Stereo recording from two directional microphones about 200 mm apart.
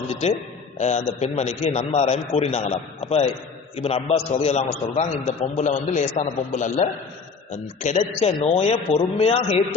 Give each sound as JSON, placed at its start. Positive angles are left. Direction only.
{"t": 0.1, "sound": "a man's voice", "side_deg": 35}